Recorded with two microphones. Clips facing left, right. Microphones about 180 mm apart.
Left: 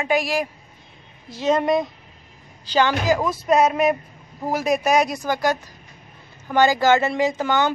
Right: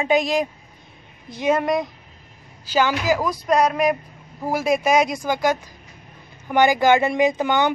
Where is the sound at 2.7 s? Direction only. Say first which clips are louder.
Left 1 dB; 10° right (ahead or behind).